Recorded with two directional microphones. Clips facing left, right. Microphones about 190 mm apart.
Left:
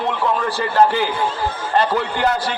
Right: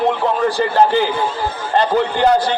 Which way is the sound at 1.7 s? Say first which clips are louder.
Right 4 dB; 30° right (ahead or behind).